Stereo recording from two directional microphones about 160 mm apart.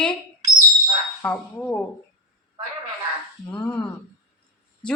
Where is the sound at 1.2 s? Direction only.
10° left (ahead or behind).